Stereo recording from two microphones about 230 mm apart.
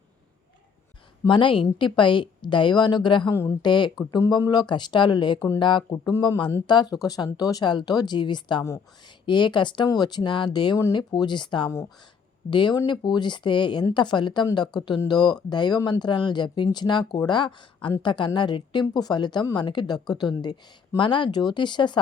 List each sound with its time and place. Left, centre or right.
1.2 s speech: left